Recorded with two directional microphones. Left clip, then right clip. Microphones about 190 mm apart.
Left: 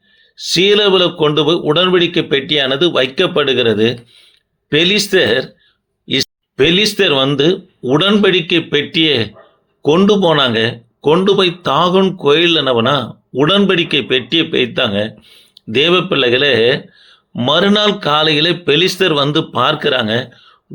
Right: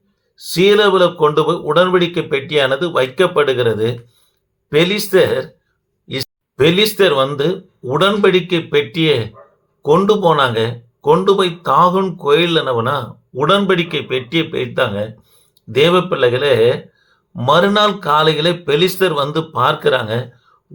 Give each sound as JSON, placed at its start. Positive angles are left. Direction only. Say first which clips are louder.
{"t": 0.5, "sound": "speech", "louder": "left 1 dB", "side_deg": 30}
{"t": 6.1, "sound": "speech", "louder": "left 8 dB", "side_deg": 30}